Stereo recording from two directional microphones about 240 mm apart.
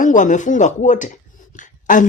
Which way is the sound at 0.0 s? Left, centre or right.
Left.